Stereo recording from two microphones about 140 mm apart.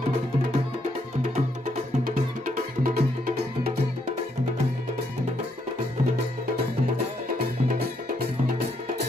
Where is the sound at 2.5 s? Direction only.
80° right.